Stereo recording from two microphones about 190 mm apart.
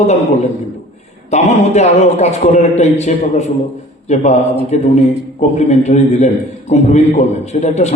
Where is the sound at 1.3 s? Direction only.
35° left (ahead or behind).